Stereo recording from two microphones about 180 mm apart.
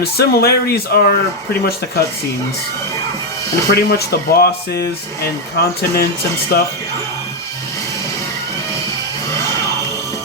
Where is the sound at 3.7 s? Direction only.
60° left (ahead or behind).